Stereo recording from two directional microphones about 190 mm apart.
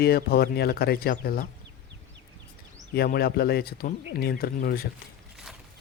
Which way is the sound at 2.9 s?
55° left (ahead or behind).